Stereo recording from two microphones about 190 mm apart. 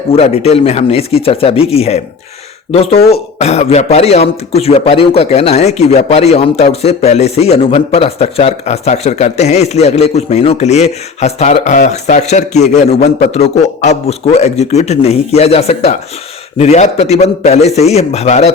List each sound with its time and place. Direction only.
0.1 s speech: 30° left (ahead or behind)